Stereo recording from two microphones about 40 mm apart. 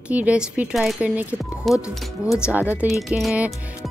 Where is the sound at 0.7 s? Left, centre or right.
Centre.